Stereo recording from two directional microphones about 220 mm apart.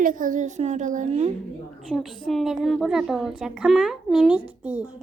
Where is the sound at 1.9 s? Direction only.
Centre (ahead or behind).